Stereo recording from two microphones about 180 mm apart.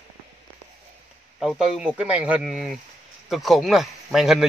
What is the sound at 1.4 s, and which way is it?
A man's voice, 5° right (ahead or behind).